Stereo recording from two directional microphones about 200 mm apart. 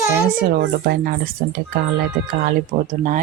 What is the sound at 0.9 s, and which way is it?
Speech, 45° right (ahead or behind).